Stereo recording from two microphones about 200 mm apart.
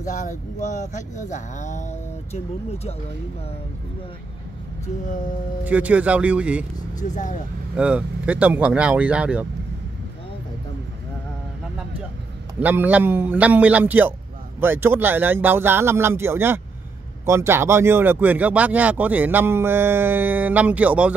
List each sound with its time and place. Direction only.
0.0 s speech: 40° left (ahead or behind)
5.0 s speech: 40° left (ahead or behind)
5.7 s speech: 5° right (ahead or behind)
7.0 s speech: 40° left (ahead or behind)
7.7 s speech: 5° right (ahead or behind)
12.5 s speech: 10° right (ahead or behind)